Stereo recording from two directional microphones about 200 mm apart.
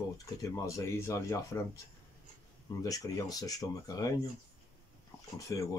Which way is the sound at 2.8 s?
20° left (ahead or behind).